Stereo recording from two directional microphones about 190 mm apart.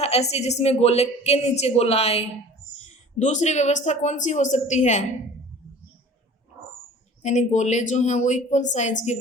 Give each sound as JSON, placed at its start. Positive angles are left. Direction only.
{"t": 0.0, "sound": "speech", "side_deg": 35}
{"t": 7.2, "sound": "speech", "side_deg": 40}